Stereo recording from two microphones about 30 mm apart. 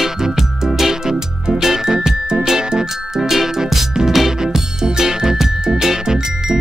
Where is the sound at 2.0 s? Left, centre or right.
Right.